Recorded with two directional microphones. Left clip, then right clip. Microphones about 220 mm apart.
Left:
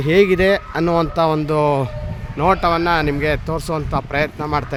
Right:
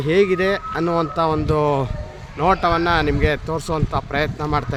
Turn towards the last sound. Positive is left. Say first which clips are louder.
# left 2 dB
turn(degrees=10)  # may be behind; listen again after turning